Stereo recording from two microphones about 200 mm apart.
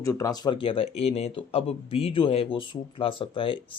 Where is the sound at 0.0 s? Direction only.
15° left (ahead or behind).